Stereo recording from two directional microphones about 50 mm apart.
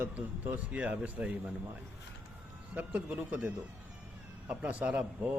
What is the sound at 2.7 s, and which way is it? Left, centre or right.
Speech, right.